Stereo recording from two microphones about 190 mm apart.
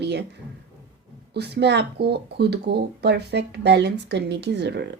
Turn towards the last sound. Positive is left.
turn(degrees=-60)  # may be behind; listen again after turning